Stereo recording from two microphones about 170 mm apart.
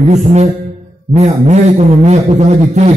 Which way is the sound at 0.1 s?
40° right (ahead or behind).